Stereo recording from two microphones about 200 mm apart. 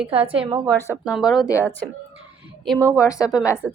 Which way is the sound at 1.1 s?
Centre (ahead or behind).